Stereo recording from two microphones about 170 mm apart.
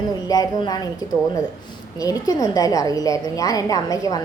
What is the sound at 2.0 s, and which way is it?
A woman's voice, 20° left (ahead or behind).